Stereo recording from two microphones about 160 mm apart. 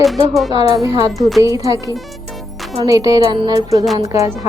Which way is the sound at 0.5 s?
20° right (ahead or behind).